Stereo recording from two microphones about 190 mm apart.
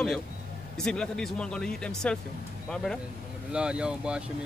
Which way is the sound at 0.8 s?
5° left (ahead or behind).